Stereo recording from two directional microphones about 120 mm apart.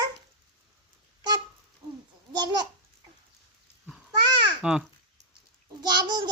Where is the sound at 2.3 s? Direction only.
35° right (ahead or behind).